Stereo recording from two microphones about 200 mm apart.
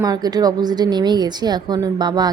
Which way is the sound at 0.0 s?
20° right (ahead or behind).